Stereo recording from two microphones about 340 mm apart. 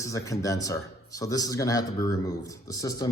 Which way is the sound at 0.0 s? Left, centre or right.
Centre.